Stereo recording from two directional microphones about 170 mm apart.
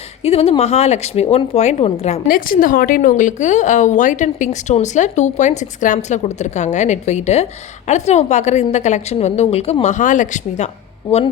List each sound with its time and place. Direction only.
0.2 s speech: 35° left (ahead or behind)
2.2 s a woman's voice: 55° left (ahead or behind)